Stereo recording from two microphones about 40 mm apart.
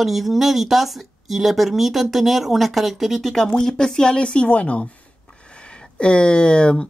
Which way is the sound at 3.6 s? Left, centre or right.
Centre.